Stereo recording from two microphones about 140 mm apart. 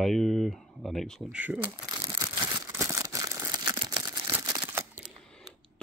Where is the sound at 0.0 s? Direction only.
Centre (ahead or behind).